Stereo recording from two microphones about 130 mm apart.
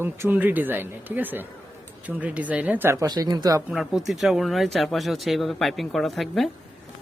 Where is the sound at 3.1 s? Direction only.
30° right (ahead or behind).